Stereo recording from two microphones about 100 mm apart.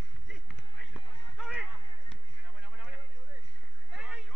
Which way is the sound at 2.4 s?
15° right (ahead or behind).